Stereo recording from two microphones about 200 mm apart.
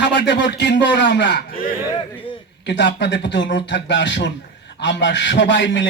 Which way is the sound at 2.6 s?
60° left (ahead or behind).